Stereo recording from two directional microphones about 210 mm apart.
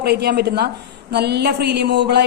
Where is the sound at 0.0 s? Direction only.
50° right (ahead or behind).